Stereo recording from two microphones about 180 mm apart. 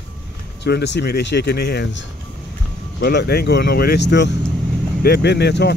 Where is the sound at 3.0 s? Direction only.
65° left (ahead or behind).